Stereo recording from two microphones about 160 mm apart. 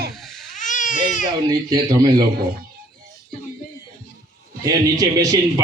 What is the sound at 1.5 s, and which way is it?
Speech, 25° right (ahead or behind).